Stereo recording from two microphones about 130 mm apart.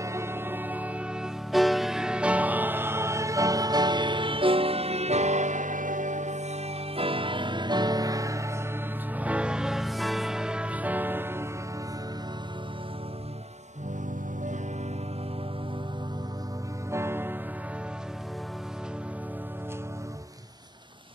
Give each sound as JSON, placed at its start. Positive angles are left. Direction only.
{"t": 0.0, "sound": "music", "side_deg": -20}
{"t": 9.1, "sound": "music", "side_deg": -10}
{"t": 16.9, "sound": "music", "side_deg": -20}